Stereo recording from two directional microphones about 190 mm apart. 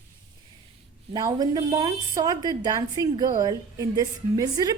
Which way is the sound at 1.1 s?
20° right (ahead or behind).